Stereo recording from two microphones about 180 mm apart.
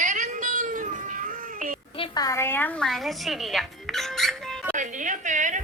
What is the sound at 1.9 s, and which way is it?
A woman's voice, 25° left (ahead or behind).